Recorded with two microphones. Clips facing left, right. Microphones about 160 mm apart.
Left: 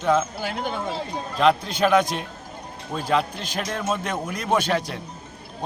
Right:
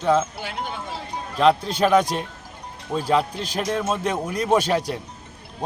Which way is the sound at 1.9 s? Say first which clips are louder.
Right 1 dB; 35° right (ahead or behind).